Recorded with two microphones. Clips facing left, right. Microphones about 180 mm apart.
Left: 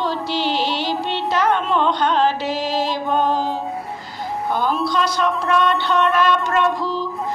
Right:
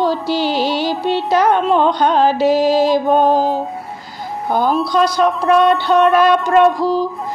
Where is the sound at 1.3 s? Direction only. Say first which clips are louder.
Right 5 dB; 40° right (ahead or behind).